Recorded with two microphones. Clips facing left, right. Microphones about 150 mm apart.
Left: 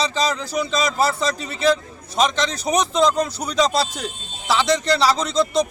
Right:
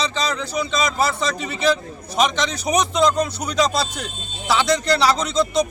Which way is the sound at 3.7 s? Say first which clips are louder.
Left 2 dB; 30° left (ahead or behind).